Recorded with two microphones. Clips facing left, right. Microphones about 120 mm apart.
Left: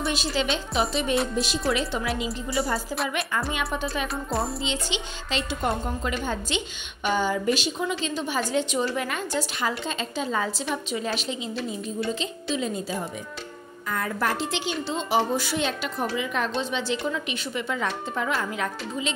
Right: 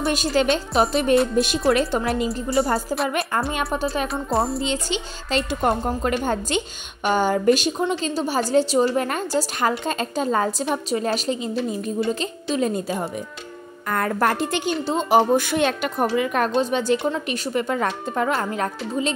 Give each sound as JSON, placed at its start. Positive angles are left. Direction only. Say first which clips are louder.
{"t": 0.0, "sound": "a woman's voice", "louder": "right 6 dB", "side_deg": -50}
{"t": 4.3, "sound": "music", "louder": "right 6 dB", "side_deg": 0}
{"t": 4.8, "sound": "a woman's voice", "louder": "right 4 dB", "side_deg": -45}
{"t": 8.0, "sound": "a woman's voice", "louder": "right 5 dB", "side_deg": -40}